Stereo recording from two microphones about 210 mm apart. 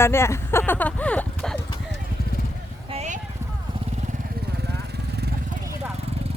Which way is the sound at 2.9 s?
35° right (ahead or behind).